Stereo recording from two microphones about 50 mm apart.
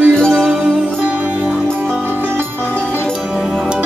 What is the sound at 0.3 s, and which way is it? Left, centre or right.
Music, centre.